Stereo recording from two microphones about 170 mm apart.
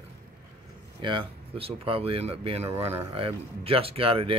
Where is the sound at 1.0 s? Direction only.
30° right (ahead or behind).